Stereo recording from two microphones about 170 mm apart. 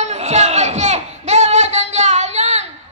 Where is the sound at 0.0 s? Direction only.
40° right (ahead or behind).